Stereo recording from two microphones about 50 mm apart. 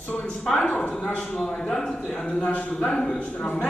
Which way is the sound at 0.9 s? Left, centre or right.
Left.